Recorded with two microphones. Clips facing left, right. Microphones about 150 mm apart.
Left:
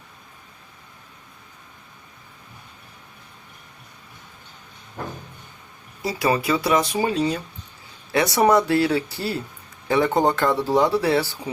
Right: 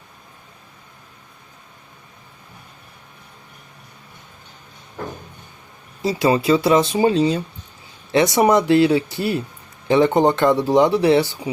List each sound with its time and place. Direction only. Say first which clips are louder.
6.0 s speech: right 4 dB; 25° right (ahead or behind)